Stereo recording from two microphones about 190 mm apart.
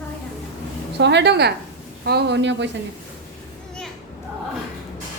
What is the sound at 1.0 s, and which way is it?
A woman's voice, 65° right (ahead or behind).